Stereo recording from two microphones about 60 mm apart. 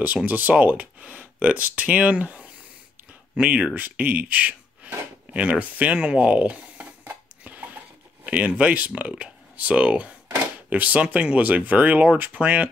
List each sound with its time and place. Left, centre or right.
0.3 s speech: right
3.8 s a sound: right
10.7 s speech: right